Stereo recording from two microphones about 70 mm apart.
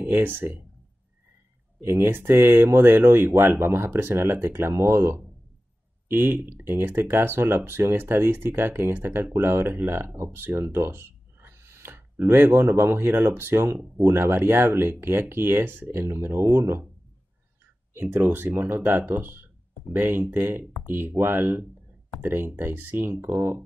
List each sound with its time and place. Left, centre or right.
0.0 s speech: right
1.8 s speech: right
17.9 s speech: right